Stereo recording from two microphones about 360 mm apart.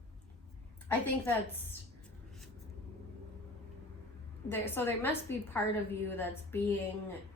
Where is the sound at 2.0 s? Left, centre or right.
Centre.